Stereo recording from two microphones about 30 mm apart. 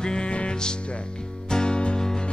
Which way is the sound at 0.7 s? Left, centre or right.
Left.